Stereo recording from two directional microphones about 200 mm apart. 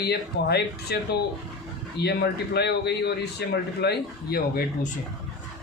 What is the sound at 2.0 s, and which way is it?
Speech, 55° left (ahead or behind).